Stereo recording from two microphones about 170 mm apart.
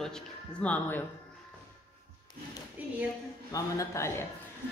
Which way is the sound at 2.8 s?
10° right (ahead or behind).